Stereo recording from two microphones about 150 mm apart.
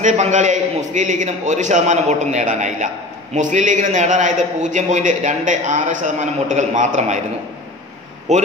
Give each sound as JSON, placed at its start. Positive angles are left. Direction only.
{"t": 0.0, "sound": "a man's voice", "side_deg": -55}
{"t": 8.3, "sound": "a man's voice", "side_deg": -50}